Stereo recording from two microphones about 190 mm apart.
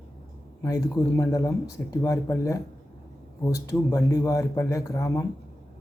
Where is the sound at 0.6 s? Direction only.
20° left (ahead or behind).